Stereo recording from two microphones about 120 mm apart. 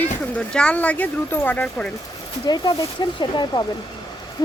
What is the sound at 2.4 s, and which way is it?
Speech, 35° left (ahead or behind).